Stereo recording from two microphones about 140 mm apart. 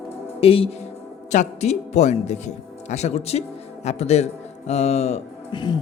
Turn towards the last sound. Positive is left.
turn(degrees=30)  # may be behind; listen again after turning